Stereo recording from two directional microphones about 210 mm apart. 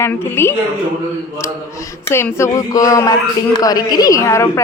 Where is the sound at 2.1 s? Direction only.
10° left (ahead or behind).